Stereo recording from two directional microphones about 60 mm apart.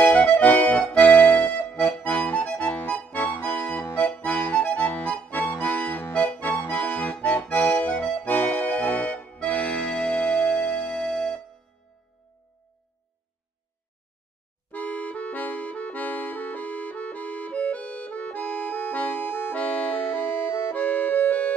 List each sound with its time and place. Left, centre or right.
0.0 s accordion: left
14.7 s accordion: left